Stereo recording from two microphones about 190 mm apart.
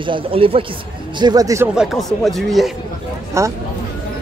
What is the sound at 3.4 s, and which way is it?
Speech, 15° right (ahead or behind).